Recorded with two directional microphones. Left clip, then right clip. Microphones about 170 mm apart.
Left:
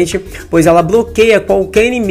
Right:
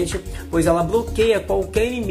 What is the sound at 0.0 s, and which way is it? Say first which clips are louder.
Speech: left 10 dB; 25° left (ahead or behind).